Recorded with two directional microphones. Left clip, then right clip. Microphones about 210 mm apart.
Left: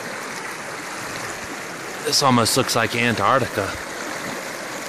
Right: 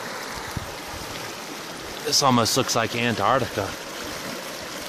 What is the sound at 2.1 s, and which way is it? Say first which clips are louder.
Speech: left 2 dB; centre (ahead or behind).